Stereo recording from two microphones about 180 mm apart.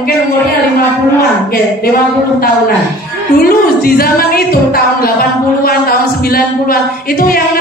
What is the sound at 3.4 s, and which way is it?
Speech, 55° left (ahead or behind).